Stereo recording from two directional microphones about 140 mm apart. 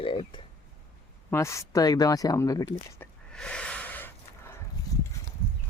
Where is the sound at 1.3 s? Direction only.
20° left (ahead or behind).